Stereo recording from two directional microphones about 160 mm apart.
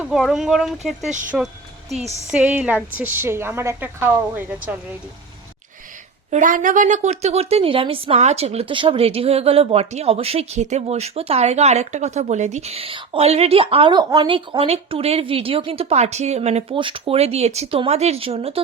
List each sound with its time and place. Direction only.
0.0 s a woman's voice: centre (ahead or behind)
6.3 s a woman's voice: 55° right (ahead or behind); by 18.6 s 40° right (ahead or behind)